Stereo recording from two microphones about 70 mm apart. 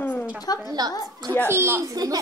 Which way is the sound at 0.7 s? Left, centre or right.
Right.